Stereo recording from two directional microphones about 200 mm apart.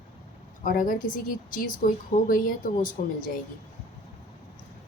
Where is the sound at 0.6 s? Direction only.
45° left (ahead or behind).